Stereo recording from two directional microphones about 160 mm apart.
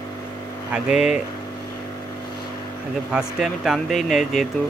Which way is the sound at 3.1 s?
5° right (ahead or behind).